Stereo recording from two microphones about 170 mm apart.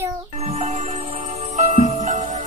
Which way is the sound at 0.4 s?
40° right (ahead or behind).